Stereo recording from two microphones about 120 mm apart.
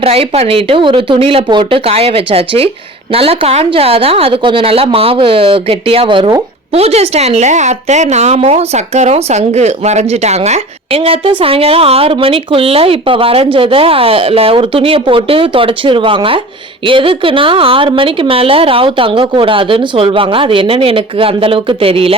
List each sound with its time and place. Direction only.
0.0 s a woman's voice: 55° right (ahead or behind)
6.7 s a woman's voice: 60° right (ahead or behind)